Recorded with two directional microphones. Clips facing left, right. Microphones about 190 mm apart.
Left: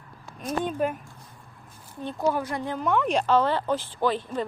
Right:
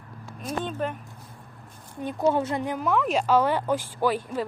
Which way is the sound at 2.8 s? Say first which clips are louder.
Left 1 dB; centre (ahead or behind).